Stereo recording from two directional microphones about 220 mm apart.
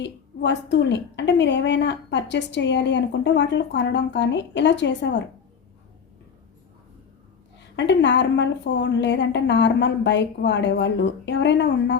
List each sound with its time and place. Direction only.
0.0 s a woman's voice: 55° left (ahead or behind)
7.8 s a woman's voice: 50° left (ahead or behind)